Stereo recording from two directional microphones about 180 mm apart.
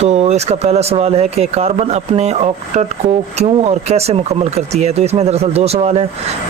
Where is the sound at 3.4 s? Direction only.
35° right (ahead or behind).